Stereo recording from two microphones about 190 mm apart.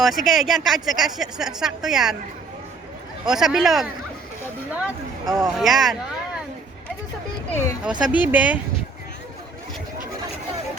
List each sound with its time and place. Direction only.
0.0 s speech: centre (ahead or behind)
3.2 s speech: centre (ahead or behind)
5.2 s speech: 20° right (ahead or behind)
5.5 s speech: centre (ahead or behind)
7.5 s speech: 15° left (ahead or behind)
7.9 s speech: 5° right (ahead or behind)